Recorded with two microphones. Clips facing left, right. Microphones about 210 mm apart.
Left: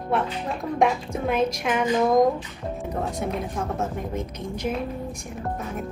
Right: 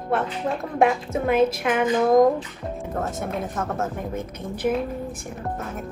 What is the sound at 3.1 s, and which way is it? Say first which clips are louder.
Speech: even; centre (ahead or behind).